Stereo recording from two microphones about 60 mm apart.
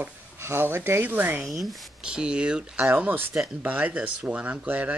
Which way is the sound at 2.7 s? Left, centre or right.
Right.